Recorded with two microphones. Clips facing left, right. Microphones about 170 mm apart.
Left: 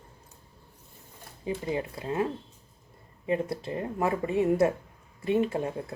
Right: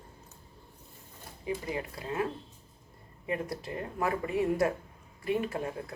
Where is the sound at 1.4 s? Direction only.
25° left (ahead or behind).